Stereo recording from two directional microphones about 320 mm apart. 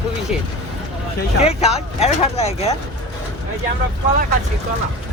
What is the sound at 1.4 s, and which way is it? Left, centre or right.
Speech, centre.